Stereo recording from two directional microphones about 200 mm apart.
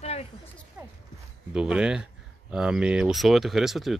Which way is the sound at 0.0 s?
30° left (ahead or behind).